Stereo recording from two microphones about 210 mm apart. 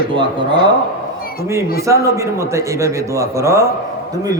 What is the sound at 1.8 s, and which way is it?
A man's voice, 15° right (ahead or behind).